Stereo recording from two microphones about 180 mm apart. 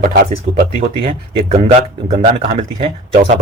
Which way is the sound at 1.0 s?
35° right (ahead or behind).